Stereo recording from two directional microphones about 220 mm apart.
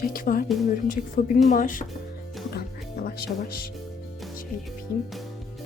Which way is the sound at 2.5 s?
45° left (ahead or behind).